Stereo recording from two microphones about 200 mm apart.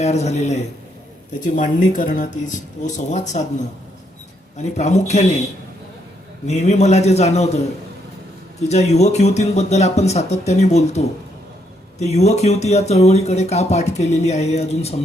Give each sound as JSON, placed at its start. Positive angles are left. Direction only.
{"t": 0.0, "sound": "speech", "side_deg": 35}
{"t": 4.5, "sound": "speech", "side_deg": 35}
{"t": 6.5, "sound": "speech", "side_deg": 35}
{"t": 8.7, "sound": "speech", "side_deg": 35}